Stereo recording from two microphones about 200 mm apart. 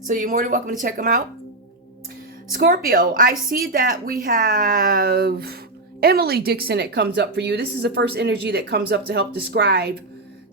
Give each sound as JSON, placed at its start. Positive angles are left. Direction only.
{"t": 0.0, "sound": "a woman's voice", "side_deg": -40}
{"t": 2.5, "sound": "a woman's voice", "side_deg": -45}